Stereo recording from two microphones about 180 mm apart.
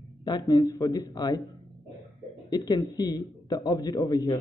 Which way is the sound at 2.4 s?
20° left (ahead or behind).